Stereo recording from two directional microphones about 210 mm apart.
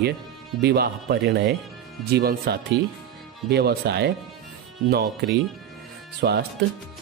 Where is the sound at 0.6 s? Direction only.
50° right (ahead or behind).